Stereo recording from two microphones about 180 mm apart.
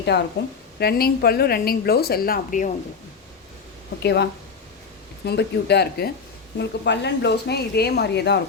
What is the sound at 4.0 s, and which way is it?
Speech, 70° left (ahead or behind).